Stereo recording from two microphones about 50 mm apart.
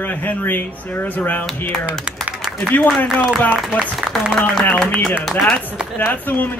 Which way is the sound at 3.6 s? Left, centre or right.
Centre.